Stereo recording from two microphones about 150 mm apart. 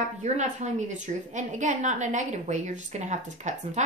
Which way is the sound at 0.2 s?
50° right (ahead or behind).